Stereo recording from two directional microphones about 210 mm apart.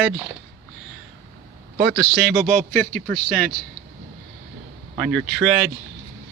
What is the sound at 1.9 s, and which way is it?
Speech, 50° right (ahead or behind).